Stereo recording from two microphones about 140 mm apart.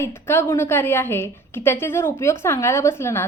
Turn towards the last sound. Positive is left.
turn(degrees=20)  # may be behind; listen again after turning